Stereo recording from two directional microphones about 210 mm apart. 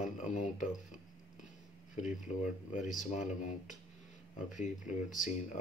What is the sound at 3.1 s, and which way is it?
Speech, 35° left (ahead or behind).